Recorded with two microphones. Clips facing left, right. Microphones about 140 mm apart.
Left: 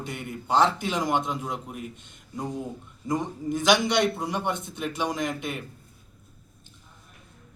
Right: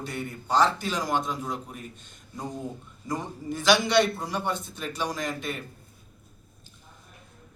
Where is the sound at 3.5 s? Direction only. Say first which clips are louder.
Right 1 dB; 20° left (ahead or behind).